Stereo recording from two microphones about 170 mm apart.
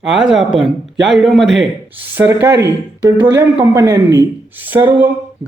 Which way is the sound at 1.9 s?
10° right (ahead or behind).